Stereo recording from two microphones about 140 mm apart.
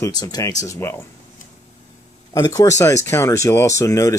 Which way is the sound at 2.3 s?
25° left (ahead or behind).